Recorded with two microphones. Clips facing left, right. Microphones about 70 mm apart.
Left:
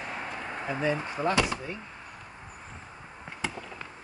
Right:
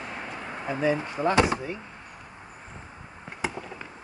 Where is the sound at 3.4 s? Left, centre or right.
Centre.